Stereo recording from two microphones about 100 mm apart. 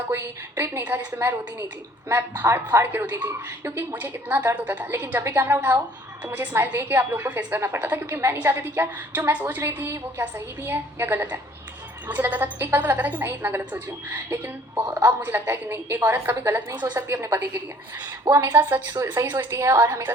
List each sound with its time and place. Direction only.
0.1 s a woman's voice: 25° right (ahead or behind)